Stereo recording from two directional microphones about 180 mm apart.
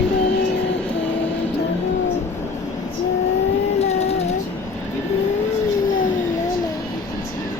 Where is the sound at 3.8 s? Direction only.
35° left (ahead or behind).